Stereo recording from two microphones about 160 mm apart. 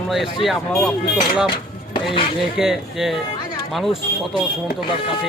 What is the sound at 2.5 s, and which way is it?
A man's voice, 5° right (ahead or behind).